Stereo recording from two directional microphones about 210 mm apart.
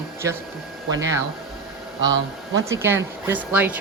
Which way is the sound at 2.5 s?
15° right (ahead or behind).